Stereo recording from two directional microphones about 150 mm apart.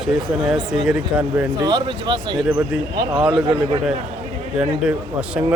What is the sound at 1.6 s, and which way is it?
Speech, 30° right (ahead or behind).